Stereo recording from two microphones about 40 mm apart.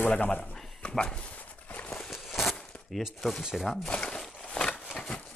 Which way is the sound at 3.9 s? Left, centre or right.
Left.